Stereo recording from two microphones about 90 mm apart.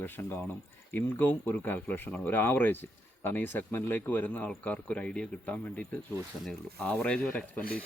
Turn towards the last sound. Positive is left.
turn(degrees=15)  # may be behind; listen again after turning